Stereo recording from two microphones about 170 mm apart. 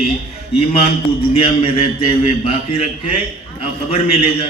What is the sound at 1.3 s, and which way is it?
A man's voice, 35° left (ahead or behind).